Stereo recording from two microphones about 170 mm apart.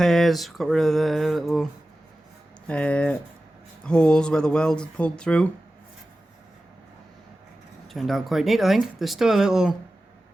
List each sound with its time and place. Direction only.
0.0 s speech: centre (ahead or behind)
2.6 s speech: 5° left (ahead or behind)
7.9 s speech: centre (ahead or behind)